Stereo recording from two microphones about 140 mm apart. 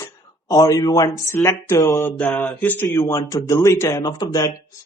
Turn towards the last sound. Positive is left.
turn(degrees=25)  # may be behind; listen again after turning